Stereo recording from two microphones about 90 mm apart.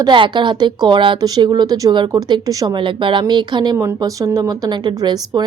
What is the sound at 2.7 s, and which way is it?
A woman's voice, 65° right (ahead or behind).